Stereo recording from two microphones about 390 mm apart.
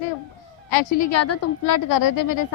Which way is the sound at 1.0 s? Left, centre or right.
Left.